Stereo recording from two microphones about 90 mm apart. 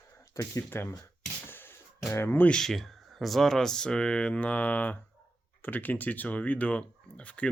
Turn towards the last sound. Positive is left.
turn(degrees=15)  # may be behind; listen again after turning